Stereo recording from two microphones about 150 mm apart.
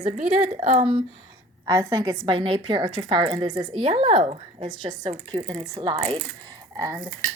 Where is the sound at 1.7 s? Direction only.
25° right (ahead or behind).